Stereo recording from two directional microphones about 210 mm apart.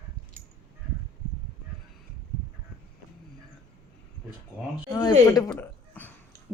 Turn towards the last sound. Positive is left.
turn(degrees=10)  # may be behind; listen again after turning